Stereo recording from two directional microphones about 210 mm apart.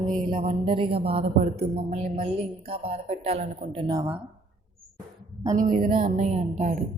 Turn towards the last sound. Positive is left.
turn(degrees=-35)  # may be behind; listen again after turning